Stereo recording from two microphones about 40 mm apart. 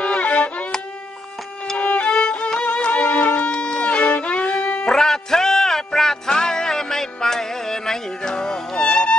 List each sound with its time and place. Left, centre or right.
0.0 s music: left
1.8 s violin: left
4.8 s music: centre